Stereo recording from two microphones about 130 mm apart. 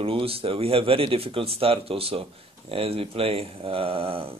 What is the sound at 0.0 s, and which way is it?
Speech, 45° right (ahead or behind).